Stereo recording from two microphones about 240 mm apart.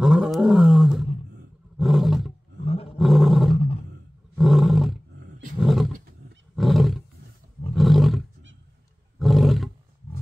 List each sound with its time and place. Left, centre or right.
0.0 s roar: centre
2.6 s roar: left
3.0 s roar: centre
3.5 s roar: left
4.4 s roar: centre
9.2 s roar: centre